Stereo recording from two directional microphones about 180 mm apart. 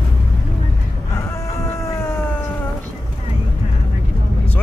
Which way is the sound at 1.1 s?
15° left (ahead or behind).